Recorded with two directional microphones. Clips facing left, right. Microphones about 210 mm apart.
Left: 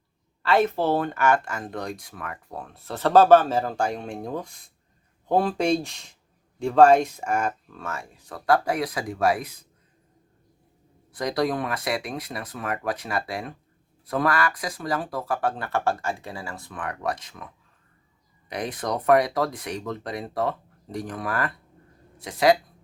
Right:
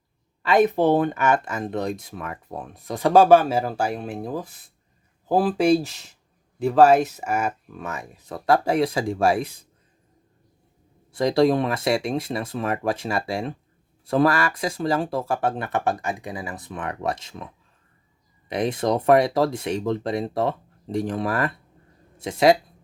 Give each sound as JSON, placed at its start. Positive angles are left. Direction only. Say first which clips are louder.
{"t": 0.4, "sound": "speech", "louder": "right 4 dB", "side_deg": -15}
{"t": 11.1, "sound": "speech", "louder": "right 7 dB", "side_deg": -25}
{"t": 18.4, "sound": "speech", "louder": "right 6 dB", "side_deg": -25}